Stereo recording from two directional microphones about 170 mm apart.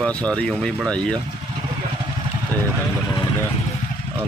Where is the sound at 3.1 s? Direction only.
20° left (ahead or behind).